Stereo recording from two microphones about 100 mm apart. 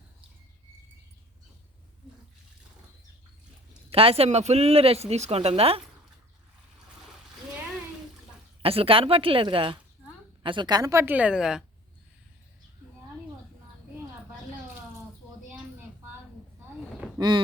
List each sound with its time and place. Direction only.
3.8 s speech: 75° right (ahead or behind)
8.6 s a woman's voice: 70° right (ahead or behind); by 11.0 s 40° right (ahead or behind)
11.0 s a woman's voice: 15° right (ahead or behind)
17.2 s speech: 50° right (ahead or behind)